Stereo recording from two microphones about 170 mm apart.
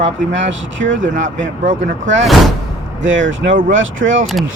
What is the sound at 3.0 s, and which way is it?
Speech, 90° right.